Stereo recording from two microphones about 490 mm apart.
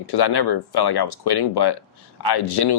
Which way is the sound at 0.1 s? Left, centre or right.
Left.